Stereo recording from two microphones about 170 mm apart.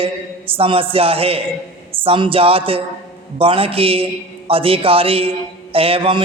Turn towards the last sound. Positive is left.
turn(degrees=-30)  # may be behind; listen again after turning